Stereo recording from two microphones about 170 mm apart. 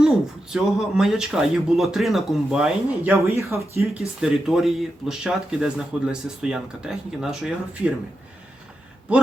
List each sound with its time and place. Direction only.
0.5 s speech: 5° right (ahead or behind)
3.2 s speech: 15° right (ahead or behind)
3.8 s speech: 5° right (ahead or behind)